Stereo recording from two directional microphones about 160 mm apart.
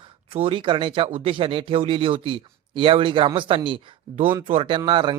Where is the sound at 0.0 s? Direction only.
35° right (ahead or behind).